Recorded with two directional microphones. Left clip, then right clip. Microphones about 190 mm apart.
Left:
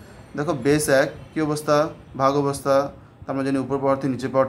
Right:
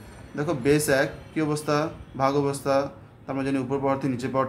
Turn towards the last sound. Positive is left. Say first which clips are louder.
# left 5 dB
turn(degrees=15)  # may be behind; listen again after turning